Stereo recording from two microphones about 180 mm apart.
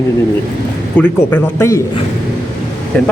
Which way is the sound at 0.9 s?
10° left (ahead or behind).